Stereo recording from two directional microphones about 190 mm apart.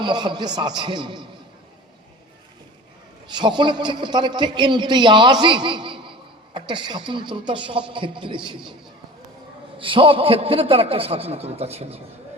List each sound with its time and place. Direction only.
0.0 s a man's voice: 25° right (ahead or behind)
3.2 s a man's voice: 25° right (ahead or behind)
9.7 s a man's voice: 25° right (ahead or behind)